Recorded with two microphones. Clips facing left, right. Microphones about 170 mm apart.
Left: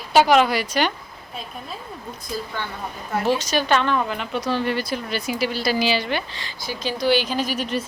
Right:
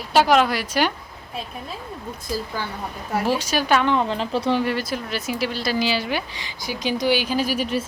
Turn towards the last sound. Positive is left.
turn(degrees=-10)  # may be behind; listen again after turning